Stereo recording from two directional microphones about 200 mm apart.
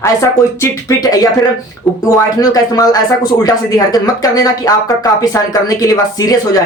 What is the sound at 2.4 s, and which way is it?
Speech, 20° left (ahead or behind).